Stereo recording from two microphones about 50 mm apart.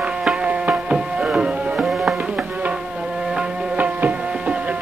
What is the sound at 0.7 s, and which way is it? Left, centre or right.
Music, centre.